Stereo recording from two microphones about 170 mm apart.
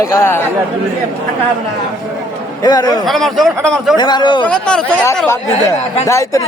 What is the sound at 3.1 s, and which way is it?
Speech, centre (ahead or behind).